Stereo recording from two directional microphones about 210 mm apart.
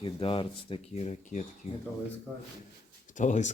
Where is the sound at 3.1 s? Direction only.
35° left (ahead or behind).